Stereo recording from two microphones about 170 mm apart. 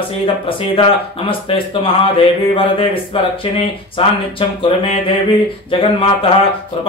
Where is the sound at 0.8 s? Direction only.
30° left (ahead or behind).